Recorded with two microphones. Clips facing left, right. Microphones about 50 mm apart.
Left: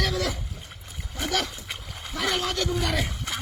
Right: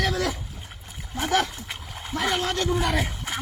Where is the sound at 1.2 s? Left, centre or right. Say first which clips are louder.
Right 5 dB; right.